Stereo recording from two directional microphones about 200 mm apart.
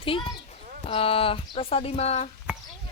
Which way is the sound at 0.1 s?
25° left (ahead or behind).